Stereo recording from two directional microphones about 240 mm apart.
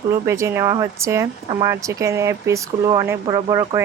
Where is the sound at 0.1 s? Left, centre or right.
Centre.